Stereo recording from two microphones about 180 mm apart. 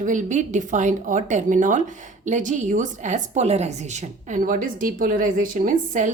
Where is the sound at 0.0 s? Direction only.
45° right (ahead or behind).